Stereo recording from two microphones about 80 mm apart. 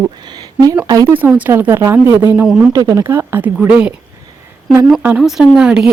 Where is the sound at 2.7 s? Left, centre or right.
Right.